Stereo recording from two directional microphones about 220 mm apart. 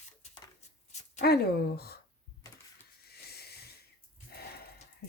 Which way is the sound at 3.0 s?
45° left (ahead or behind).